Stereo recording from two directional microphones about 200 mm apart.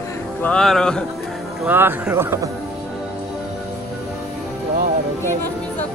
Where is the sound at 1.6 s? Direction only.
10° right (ahead or behind).